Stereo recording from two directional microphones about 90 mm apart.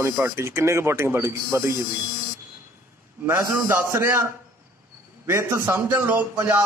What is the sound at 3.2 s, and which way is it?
Speech, 25° right (ahead or behind).